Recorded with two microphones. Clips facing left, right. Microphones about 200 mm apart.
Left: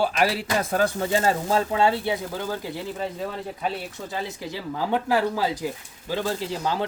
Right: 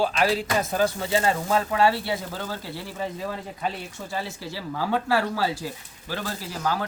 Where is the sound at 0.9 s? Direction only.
45° left (ahead or behind).